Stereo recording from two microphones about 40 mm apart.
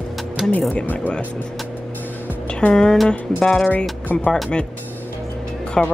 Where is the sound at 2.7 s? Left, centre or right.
Left.